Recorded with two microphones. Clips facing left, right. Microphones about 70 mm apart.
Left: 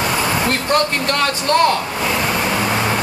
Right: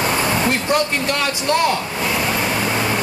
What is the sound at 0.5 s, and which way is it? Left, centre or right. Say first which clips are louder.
Speech: left 1 dB; centre.